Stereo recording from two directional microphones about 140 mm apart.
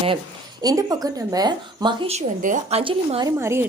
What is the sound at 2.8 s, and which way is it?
Speech, 40° right (ahead or behind).